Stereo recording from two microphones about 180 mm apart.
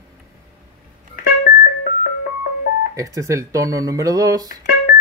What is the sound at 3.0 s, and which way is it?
Speech, 15° right (ahead or behind).